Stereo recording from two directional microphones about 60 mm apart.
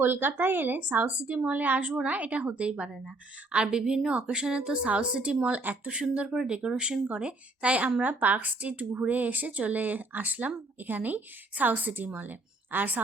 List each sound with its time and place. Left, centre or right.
0.0 s speech: right; by 7.9 s centre
8.0 s speech: right